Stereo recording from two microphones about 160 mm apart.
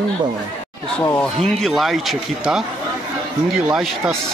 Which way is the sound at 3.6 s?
5° right (ahead or behind).